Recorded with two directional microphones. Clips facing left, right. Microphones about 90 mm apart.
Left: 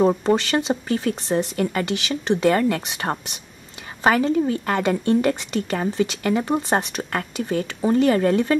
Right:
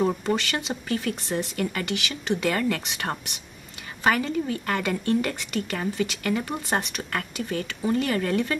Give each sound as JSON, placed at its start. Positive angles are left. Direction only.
{"t": 0.0, "sound": "a woman's voice", "side_deg": 30}